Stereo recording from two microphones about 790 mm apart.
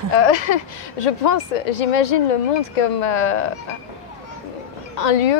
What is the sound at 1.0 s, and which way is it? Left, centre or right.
A woman's voice, left.